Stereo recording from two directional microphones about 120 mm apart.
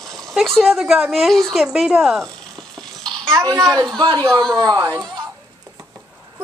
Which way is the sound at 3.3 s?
25° right (ahead or behind).